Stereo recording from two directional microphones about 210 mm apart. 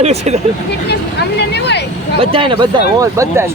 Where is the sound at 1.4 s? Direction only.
55° left (ahead or behind).